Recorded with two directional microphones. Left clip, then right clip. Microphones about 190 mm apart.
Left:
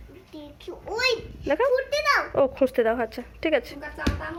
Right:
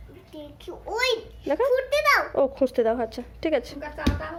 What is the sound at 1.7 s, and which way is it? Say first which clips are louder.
Speech: right 2 dB; 20° right (ahead or behind).